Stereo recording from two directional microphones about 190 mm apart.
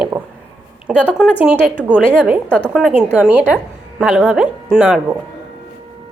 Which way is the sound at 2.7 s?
5° right (ahead or behind).